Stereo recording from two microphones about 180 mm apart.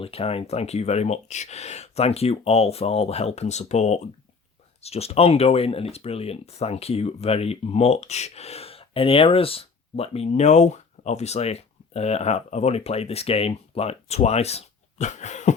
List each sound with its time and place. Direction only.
0.0 s speech: 30° left (ahead or behind)